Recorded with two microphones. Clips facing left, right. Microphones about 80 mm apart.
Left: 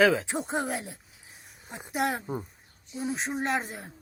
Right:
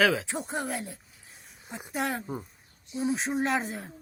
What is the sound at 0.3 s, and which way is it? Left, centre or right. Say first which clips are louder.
Speech: left 2 dB; left.